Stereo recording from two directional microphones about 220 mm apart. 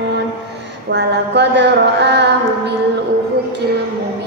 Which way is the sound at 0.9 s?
50° right (ahead or behind).